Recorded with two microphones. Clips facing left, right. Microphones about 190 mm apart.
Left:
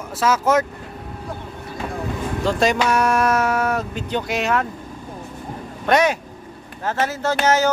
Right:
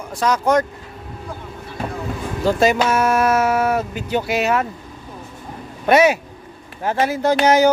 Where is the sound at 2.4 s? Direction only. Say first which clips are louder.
Right 3 dB; 5° right (ahead or behind).